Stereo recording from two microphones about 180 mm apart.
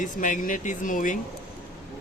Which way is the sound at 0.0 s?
45° left (ahead or behind).